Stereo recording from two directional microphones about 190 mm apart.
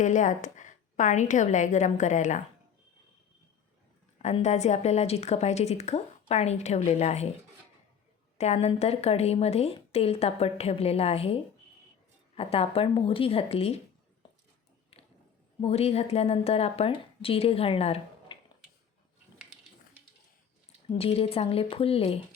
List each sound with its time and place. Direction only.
0.0 s speech: 40° left (ahead or behind)
4.2 s speech: 35° left (ahead or behind)
8.4 s speech: 35° left (ahead or behind)
12.4 s speech: 30° left (ahead or behind)
15.6 s speech: 30° left (ahead or behind)
20.9 s speech: 30° left (ahead or behind)